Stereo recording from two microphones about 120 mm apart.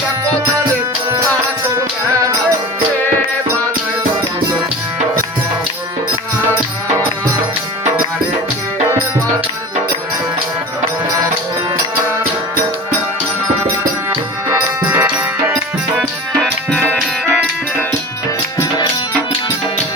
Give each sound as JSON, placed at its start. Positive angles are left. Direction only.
{"t": 14.1, "sound": "music", "side_deg": -15}
{"t": 16.0, "sound": "music", "side_deg": 5}
{"t": 18.5, "sound": "music", "side_deg": 30}